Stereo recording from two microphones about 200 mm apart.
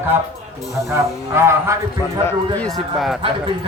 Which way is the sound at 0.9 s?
15° right (ahead or behind).